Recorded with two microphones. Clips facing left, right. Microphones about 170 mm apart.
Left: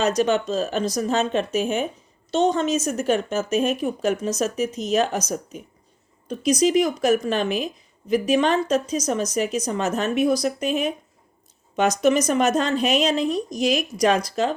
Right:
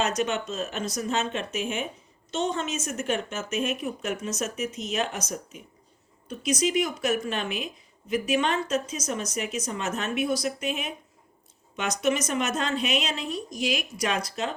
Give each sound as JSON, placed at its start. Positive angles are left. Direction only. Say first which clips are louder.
{"t": 0.0, "sound": "speech", "louder": "left 6 dB", "side_deg": 35}